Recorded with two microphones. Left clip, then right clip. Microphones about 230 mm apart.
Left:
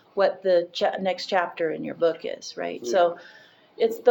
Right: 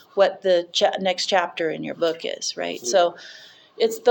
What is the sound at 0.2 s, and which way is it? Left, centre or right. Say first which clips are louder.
Speech: right 2 dB; right.